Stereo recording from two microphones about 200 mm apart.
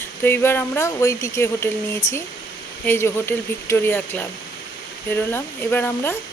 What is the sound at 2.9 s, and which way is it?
Speech, 10° left (ahead or behind).